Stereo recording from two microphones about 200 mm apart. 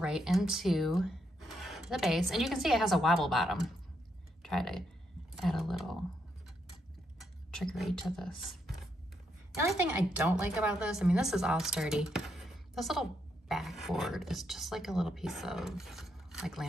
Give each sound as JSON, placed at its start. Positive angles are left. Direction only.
{"t": 0.0, "sound": "a woman's voice", "side_deg": -5}
{"t": 7.2, "sound": "a woman's voice", "side_deg": 0}